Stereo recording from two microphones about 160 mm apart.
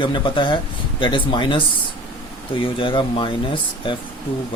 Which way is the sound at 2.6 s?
30° left (ahead or behind).